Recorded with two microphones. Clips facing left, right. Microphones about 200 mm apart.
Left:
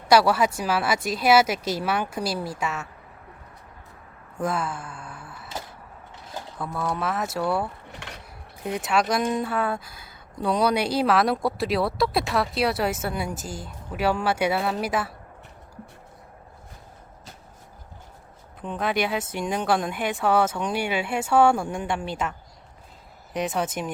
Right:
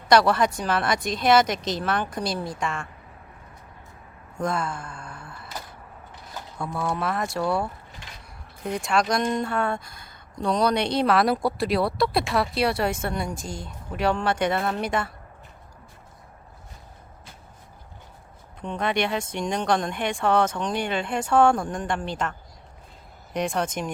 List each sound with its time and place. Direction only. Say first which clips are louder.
0.1 s speech: even; 5° left (ahead or behind)
4.4 s a sound: even; 5° left (ahead or behind)
6.6 s speech: right 1 dB; centre (ahead or behind)
7.9 s dishes: left 5 dB; 70° left (ahead or behind)
8.6 s speech: even; 5° left (ahead or behind)
18.6 s speech: even; 5° left (ahead or behind)